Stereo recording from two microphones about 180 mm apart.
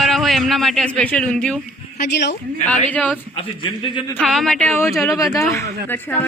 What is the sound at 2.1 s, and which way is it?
Speech, 70° left (ahead or behind).